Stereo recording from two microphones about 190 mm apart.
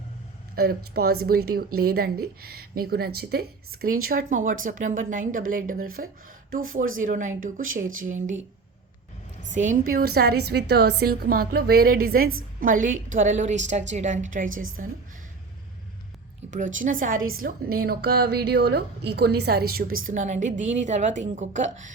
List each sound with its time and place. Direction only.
0.5 s speech: 55° right (ahead or behind)
9.5 s a woman's voice: 40° right (ahead or behind)
16.4 s a sound: 35° right (ahead or behind)
16.8 s a woman's voice: 45° right (ahead or behind)
20.1 s a woman's voice: 40° right (ahead or behind)